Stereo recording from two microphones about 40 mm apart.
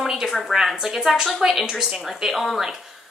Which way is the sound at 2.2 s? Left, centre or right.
Centre.